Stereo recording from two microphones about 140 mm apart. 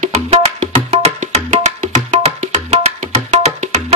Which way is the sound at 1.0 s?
50° right (ahead or behind).